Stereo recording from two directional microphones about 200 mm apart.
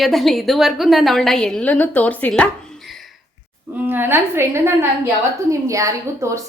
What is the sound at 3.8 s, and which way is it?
A woman's voice, 10° right (ahead or behind).